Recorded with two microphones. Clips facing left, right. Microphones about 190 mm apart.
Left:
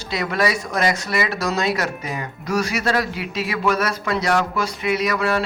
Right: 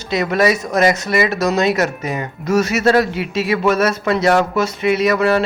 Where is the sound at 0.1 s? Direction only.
20° right (ahead or behind).